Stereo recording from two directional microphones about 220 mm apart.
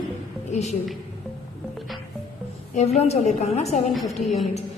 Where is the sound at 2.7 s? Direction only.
30° left (ahead or behind).